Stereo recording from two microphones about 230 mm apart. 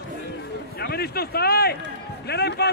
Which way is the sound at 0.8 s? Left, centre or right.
Left.